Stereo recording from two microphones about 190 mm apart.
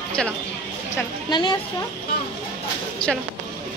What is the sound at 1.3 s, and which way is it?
Speech, 25° left (ahead or behind).